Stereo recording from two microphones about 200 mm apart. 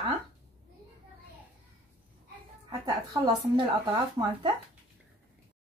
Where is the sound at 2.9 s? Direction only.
25° right (ahead or behind).